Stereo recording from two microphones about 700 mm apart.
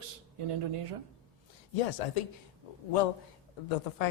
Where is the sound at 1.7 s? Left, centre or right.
Left.